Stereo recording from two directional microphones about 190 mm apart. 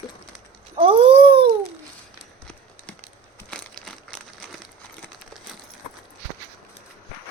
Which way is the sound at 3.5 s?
5° left (ahead or behind).